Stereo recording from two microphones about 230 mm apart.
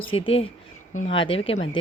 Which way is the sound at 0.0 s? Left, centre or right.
Left.